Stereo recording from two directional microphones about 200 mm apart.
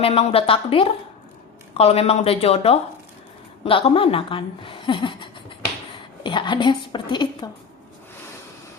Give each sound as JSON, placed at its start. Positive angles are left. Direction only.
{"t": 0.0, "sound": "a woman's voice", "side_deg": 30}